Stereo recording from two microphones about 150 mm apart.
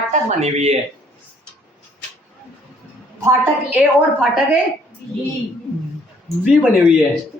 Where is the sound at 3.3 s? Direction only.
20° right (ahead or behind).